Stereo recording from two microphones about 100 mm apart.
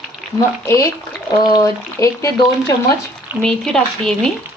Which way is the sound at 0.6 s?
30° left (ahead or behind).